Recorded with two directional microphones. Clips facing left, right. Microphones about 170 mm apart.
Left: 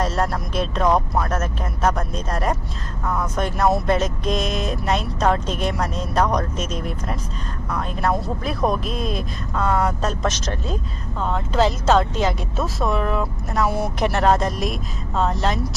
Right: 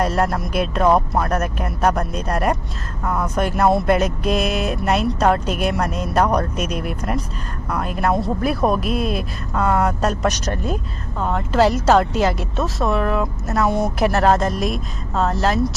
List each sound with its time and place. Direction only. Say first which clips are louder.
0.0 s speech: right 3 dB; 10° right (ahead or behind)